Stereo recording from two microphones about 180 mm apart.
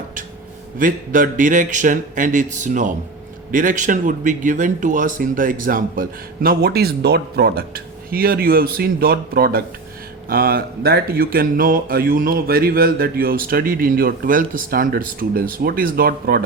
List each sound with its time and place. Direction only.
0.8 s speech: 50° right (ahead or behind)